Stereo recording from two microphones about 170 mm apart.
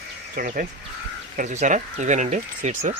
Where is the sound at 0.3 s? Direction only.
55° right (ahead or behind).